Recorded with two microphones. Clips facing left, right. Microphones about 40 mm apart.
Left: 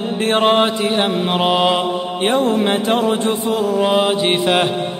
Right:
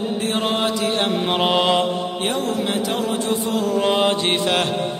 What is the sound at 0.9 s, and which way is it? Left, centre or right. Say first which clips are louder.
Mantra: left 3 dB; centre.